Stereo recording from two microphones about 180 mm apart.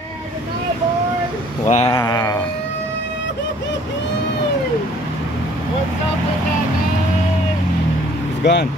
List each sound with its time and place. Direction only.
1.7 s speech: 35° left (ahead or behind)
2.0 s speech: 20° left (ahead or behind)
8.4 s speech: 75° left (ahead or behind)